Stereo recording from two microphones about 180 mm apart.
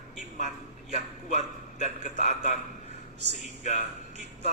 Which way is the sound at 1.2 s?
40° left (ahead or behind).